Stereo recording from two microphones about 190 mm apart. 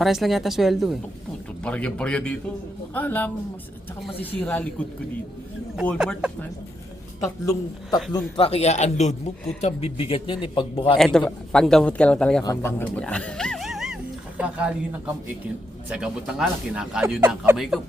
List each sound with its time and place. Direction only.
0.0 s speech: centre (ahead or behind)
6.0 s speech: 5° right (ahead or behind)
7.2 s a man's voice: 20° left (ahead or behind)
8.1 s a man's voice: 30° left (ahead or behind)
10.9 s speech: centre (ahead or behind)
12.4 s a man's voice: 20° left (ahead or behind)
12.8 s a man's voice: 5° left (ahead or behind); by 17.6 s 10° right (ahead or behind)